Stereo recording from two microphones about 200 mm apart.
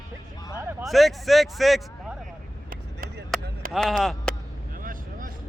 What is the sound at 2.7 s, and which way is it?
Chop, 45° right (ahead or behind).